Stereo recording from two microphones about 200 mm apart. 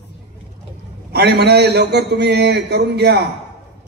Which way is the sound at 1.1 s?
55° right (ahead or behind).